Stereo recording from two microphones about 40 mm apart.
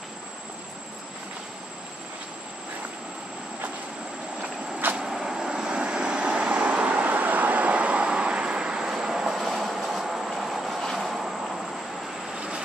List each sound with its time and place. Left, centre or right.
4.9 s vehicle: centre
12.4 s vehicle: right